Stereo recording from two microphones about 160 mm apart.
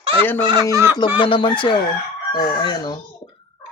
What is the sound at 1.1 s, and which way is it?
A man's voice, 30° left (ahead or behind).